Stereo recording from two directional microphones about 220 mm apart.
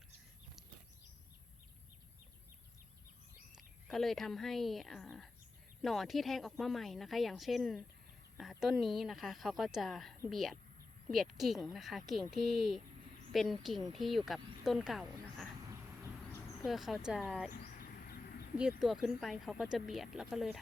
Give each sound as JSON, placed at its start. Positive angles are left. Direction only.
{"t": 3.8, "sound": "speech", "side_deg": 0}
{"t": 16.6, "sound": "speech", "side_deg": 0}
{"t": 17.5, "sound": "bird", "side_deg": 45}
{"t": 18.8, "sound": "speech", "side_deg": 0}